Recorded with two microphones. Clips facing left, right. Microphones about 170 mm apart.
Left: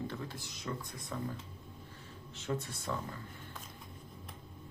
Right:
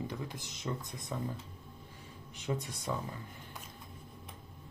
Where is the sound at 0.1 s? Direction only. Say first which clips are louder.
Right 1 dB; 15° right (ahead or behind).